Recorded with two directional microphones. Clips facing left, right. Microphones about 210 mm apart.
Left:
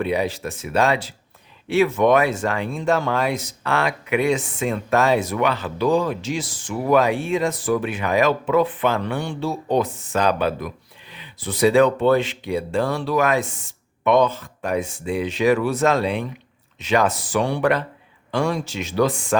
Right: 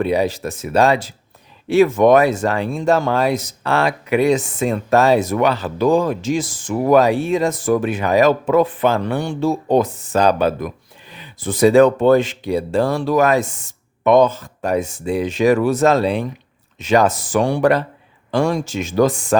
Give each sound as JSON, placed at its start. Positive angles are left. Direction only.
{"t": 0.0, "sound": "speech", "side_deg": -40}